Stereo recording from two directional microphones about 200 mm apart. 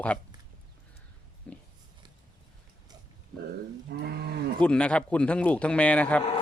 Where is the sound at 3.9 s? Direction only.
55° right (ahead or behind).